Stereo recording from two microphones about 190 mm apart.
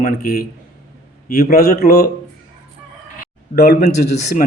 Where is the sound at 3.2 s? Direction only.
50° left (ahead or behind).